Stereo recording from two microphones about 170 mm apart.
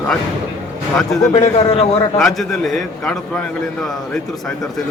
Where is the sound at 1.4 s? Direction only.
40° left (ahead or behind).